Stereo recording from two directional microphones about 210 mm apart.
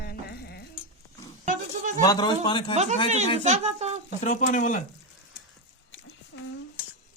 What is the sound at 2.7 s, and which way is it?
A child's voice, 30° right (ahead or behind).